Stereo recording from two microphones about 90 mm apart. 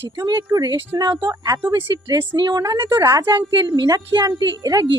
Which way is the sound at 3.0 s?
35° right (ahead or behind).